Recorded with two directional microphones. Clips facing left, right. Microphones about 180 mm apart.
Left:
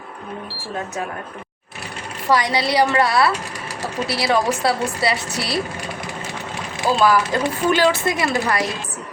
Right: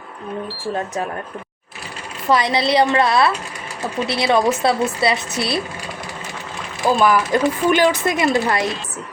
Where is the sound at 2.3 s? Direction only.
25° right (ahead or behind).